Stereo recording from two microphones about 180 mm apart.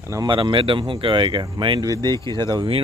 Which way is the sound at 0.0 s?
20° right (ahead or behind).